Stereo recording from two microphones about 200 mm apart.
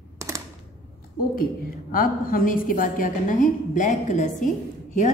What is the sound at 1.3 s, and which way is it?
A woman's voice, 45° left (ahead or behind).